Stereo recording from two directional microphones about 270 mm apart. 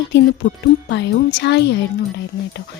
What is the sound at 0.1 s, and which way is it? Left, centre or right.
A woman's voice, left.